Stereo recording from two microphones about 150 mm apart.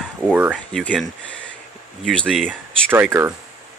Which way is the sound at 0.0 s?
5° right (ahead or behind).